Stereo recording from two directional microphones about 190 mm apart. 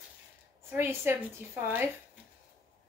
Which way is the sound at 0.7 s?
15° right (ahead or behind).